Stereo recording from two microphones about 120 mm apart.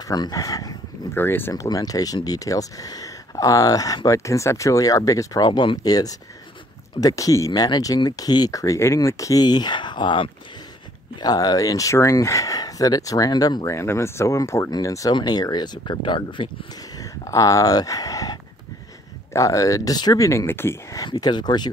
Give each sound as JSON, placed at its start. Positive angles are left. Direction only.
{"t": 0.1, "sound": "speech", "side_deg": 30}
{"t": 1.1, "sound": "speech", "side_deg": 15}
{"t": 1.5, "sound": "speech", "side_deg": 30}
{"t": 13.7, "sound": "speech", "side_deg": 25}
{"t": 17.0, "sound": "speech", "side_deg": 30}
{"t": 21.0, "sound": "speech", "side_deg": 35}